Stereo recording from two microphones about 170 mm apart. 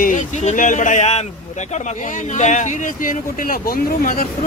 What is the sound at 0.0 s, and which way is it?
Speech, 50° left (ahead or behind).